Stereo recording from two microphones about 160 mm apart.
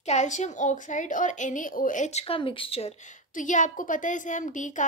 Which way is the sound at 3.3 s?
55° left (ahead or behind).